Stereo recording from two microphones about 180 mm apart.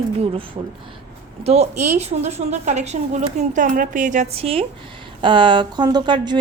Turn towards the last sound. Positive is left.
turn(degrees=-25)  # may be behind; listen again after turning